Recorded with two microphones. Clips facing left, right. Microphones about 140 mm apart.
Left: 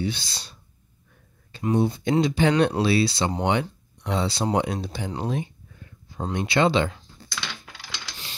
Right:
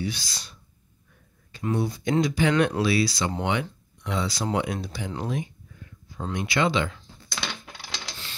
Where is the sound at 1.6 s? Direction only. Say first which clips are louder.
Left 4 dB; 20° left (ahead or behind).